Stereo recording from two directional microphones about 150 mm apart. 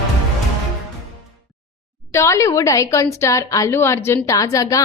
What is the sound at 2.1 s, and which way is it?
A woman's voice, 20° left (ahead or behind).